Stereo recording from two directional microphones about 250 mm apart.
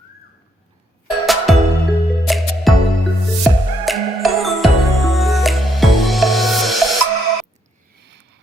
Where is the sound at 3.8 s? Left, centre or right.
Centre.